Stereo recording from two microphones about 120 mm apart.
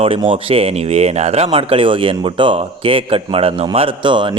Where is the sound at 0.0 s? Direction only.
50° right (ahead or behind).